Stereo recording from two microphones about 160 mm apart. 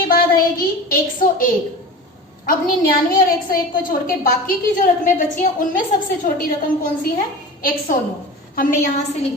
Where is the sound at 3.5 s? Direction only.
60° left (ahead or behind).